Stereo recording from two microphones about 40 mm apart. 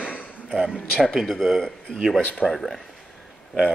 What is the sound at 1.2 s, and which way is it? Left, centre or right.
Speech, centre.